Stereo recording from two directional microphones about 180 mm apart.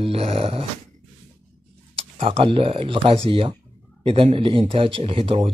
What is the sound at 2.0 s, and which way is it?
A man's voice, 30° right (ahead or behind).